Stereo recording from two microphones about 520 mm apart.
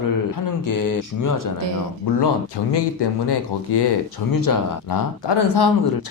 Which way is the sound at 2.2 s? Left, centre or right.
Left.